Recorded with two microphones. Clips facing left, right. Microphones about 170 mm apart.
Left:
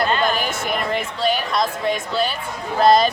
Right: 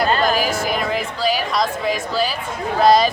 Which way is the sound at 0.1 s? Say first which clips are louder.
Right 2 dB; 40° right (ahead or behind).